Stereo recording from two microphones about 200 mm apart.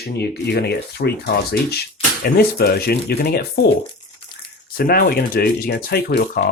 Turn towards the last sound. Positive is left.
turn(degrees=55)  # may be behind; listen again after turning